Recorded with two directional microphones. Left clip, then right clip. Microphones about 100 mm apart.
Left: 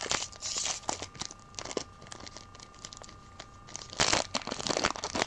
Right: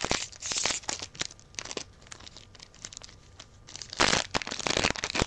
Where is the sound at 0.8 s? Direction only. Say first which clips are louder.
Even; 10° right (ahead or behind).